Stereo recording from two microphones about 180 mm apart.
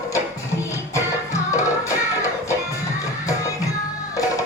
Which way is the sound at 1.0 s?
15° left (ahead or behind).